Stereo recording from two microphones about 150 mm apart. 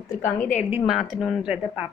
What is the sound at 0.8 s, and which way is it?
A woman's voice, centre (ahead or behind).